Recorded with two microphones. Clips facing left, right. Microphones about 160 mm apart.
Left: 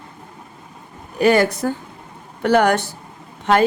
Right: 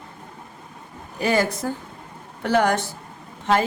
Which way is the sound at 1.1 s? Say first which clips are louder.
Left 6 dB; 70° left (ahead or behind).